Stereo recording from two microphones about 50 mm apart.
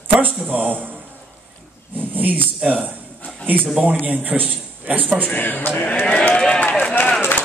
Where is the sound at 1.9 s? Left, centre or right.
Right.